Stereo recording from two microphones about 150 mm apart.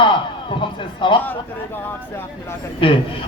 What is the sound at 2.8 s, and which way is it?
Speech, 35° left (ahead or behind).